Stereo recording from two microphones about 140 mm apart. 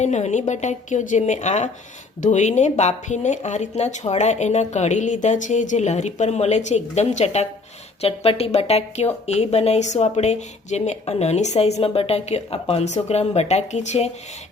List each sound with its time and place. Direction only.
0.0 s speech: 55° left (ahead or behind)